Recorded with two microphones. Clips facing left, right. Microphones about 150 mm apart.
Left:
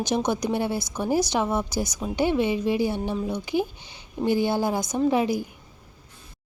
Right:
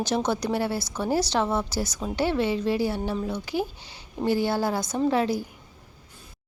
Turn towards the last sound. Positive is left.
turn(degrees=15)  # may be behind; listen again after turning